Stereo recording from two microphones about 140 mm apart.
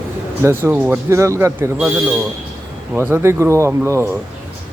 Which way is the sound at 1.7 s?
5° right (ahead or behind).